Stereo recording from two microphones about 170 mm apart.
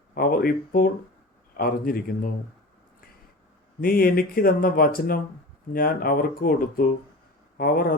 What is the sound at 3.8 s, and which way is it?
Speech, 60° left (ahead or behind).